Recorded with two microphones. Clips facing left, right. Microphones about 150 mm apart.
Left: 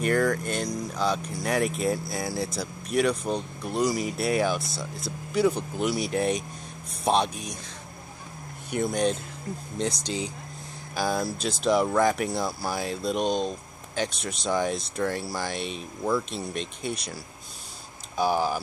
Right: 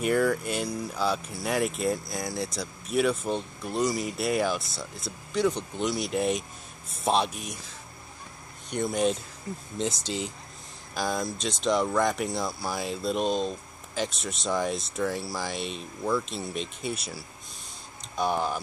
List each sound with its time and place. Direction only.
0.0 s speech: 5° right (ahead or behind)
8.6 s speech: centre (ahead or behind)